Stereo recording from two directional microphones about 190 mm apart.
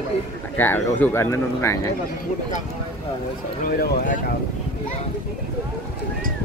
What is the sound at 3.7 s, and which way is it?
Speech, 50° left (ahead or behind).